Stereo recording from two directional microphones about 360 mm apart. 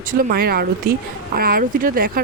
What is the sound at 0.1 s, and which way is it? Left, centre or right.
Speech, right.